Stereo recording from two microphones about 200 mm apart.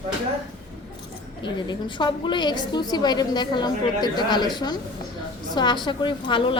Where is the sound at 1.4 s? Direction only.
20° left (ahead or behind).